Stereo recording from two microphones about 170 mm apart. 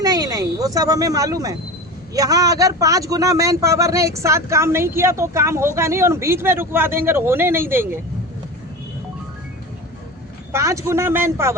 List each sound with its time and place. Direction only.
0.0 s speech: 20° right (ahead or behind)
10.5 s speech: 15° right (ahead or behind)